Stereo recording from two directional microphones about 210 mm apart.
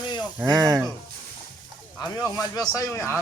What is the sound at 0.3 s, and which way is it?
Speech, 15° right (ahead or behind).